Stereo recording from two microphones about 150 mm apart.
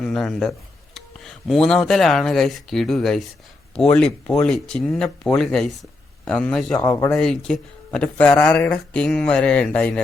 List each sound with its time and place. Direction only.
0.0 s a man's voice: 5° left (ahead or behind)
6.7 s speech: 25° left (ahead or behind)
7.1 s speech: 5° left (ahead or behind)